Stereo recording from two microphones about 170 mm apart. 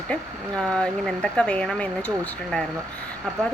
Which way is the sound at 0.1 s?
5° left (ahead or behind).